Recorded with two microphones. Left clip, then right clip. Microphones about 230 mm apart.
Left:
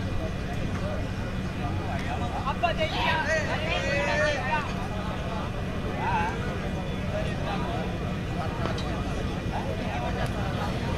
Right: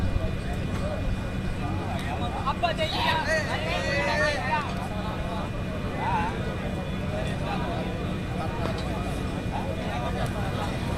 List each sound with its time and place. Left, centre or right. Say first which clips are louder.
2.5 s vehicle: even; right